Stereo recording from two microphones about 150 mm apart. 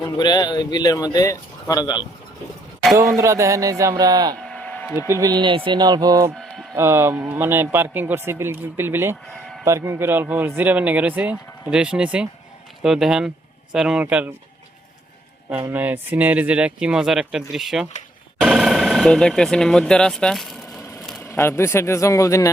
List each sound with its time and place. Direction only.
0.2 s speech: 30° left (ahead or behind)
2.9 s a sound: 20° right (ahead or behind)
4.4 s a sound: 5° left (ahead or behind)
4.9 s a sound: 20° right (ahead or behind)
6.7 s speech: 15° right (ahead or behind)
9.2 s speech: 5° left (ahead or behind)
9.6 s speech: 20° right (ahead or behind)
15.7 s speech: 10° right (ahead or behind)
21.2 s speech: 15° left (ahead or behind)